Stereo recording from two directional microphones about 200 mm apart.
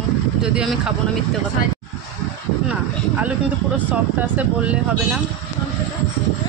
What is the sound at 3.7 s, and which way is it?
Speech, 10° right (ahead or behind).